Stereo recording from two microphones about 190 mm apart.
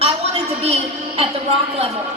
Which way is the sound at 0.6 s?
30° right (ahead or behind).